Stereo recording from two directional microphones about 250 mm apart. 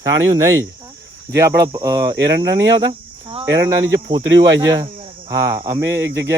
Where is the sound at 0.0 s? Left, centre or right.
Centre.